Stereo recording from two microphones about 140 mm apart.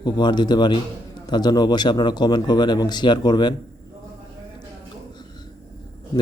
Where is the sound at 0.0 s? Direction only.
30° left (ahead or behind).